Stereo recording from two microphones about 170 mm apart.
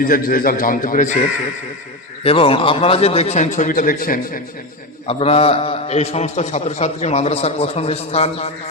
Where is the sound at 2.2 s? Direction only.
35° left (ahead or behind); by 4.4 s 55° left (ahead or behind).